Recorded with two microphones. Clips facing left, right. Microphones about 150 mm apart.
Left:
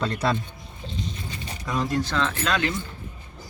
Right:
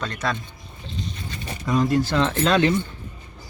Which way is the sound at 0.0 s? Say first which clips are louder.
Left 2 dB; 30° left (ahead or behind).